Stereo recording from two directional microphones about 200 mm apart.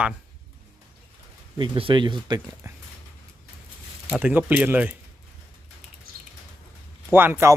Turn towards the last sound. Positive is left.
turn(degrees=-10)  # may be behind; listen again after turning